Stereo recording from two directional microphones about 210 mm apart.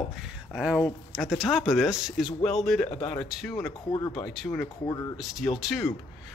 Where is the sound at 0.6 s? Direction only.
5° right (ahead or behind).